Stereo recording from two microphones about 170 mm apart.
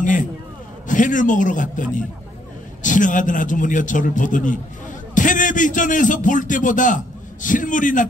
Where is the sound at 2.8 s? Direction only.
50° left (ahead or behind).